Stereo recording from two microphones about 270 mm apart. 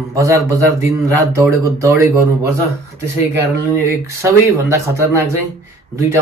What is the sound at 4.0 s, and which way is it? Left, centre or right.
A man's voice, centre.